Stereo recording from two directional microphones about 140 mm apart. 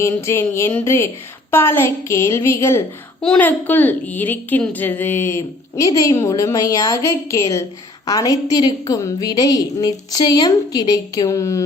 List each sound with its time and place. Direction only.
0.0 s a woman's voice: 20° left (ahead or behind)
3.2 s a woman's voice: 10° left (ahead or behind); by 11.6 s 25° left (ahead or behind)